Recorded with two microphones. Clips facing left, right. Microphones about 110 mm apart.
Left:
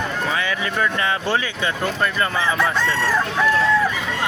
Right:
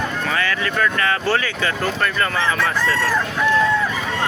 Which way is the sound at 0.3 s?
15° left (ahead or behind).